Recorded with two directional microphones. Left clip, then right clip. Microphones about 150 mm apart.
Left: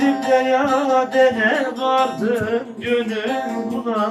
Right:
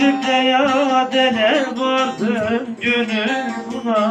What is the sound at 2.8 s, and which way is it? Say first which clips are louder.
Music: right 3 dB; 50° left (ahead or behind).